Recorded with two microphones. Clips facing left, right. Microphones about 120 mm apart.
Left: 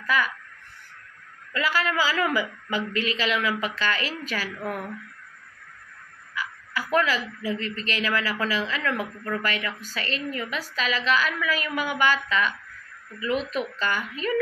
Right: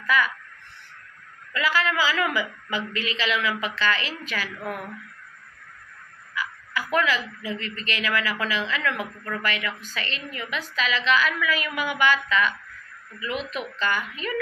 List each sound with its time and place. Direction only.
0.1 s speech: 45° left (ahead or behind)
1.5 s a woman's voice: 40° left (ahead or behind)
6.3 s a woman's voice: 40° left (ahead or behind)